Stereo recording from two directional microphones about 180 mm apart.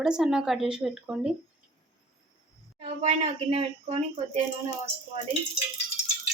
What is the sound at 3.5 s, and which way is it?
Speech, 35° right (ahead or behind).